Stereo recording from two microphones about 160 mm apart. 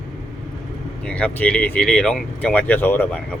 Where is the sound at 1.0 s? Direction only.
5° left (ahead or behind).